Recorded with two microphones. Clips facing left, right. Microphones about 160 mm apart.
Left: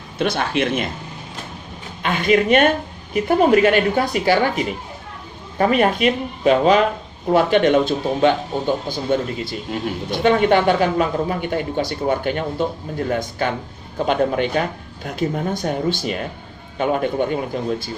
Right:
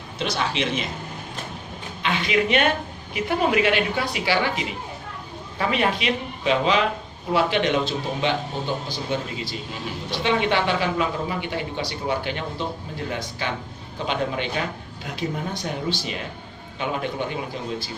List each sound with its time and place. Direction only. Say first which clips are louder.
0.2 s speech: left 5 dB; 55° left (ahead or behind)
2.0 s speech: left 6 dB; 50° left (ahead or behind)